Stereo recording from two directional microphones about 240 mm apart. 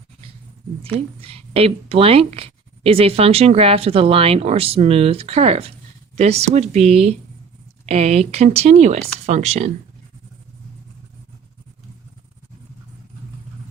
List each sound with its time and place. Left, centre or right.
0.8 s speech: right